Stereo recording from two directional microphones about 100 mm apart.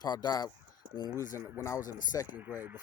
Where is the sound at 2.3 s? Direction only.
20° right (ahead or behind).